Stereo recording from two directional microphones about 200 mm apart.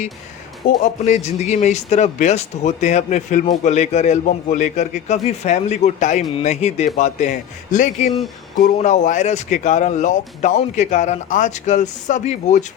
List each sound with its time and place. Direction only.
0.8 s speech: 35° left (ahead or behind)